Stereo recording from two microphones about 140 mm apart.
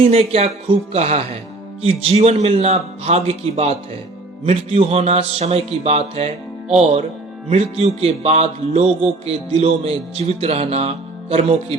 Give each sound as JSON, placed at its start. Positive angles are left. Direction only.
{"t": 0.0, "sound": "music", "side_deg": -45}
{"t": 7.5, "sound": "music", "side_deg": -45}